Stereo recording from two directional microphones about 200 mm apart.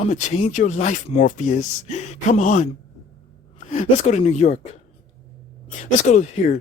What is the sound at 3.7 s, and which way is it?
Speech, 35° left (ahead or behind).